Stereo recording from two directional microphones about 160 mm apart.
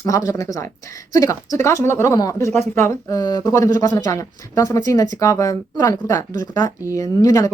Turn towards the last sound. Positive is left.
turn(degrees=20)  # may be behind; listen again after turning